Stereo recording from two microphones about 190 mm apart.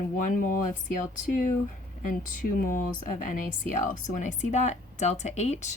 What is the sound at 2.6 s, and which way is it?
Speech, 45° left (ahead or behind).